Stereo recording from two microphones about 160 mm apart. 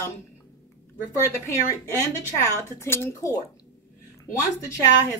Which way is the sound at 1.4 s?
15° left (ahead or behind).